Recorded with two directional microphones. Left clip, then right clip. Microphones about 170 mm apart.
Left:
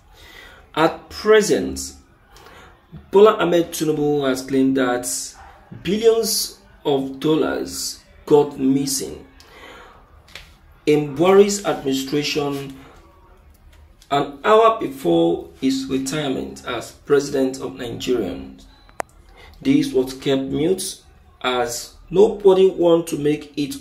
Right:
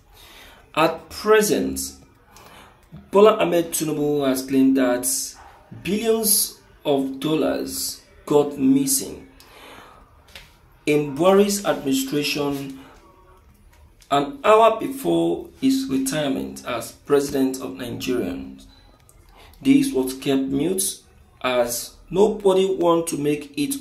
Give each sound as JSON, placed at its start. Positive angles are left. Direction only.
{"t": 0.7, "sound": "speech", "side_deg": 0}
{"t": 3.1, "sound": "speech", "side_deg": 5}
{"t": 10.8, "sound": "speech", "side_deg": 0}
{"t": 14.0, "sound": "speech", "side_deg": 0}
{"t": 19.6, "sound": "speech", "side_deg": 0}